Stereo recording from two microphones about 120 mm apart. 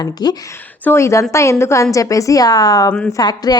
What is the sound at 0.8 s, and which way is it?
A woman's voice, 20° left (ahead or behind).